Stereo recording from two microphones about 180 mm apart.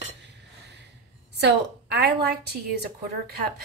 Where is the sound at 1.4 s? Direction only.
65° right (ahead or behind).